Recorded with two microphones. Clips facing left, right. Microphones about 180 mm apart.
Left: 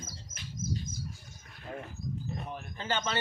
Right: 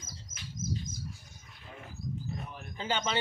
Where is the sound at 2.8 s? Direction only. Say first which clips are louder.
Right 1 dB; 15° right (ahead or behind).